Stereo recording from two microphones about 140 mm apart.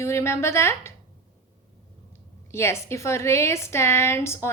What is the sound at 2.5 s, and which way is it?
A woman's voice, 20° left (ahead or behind).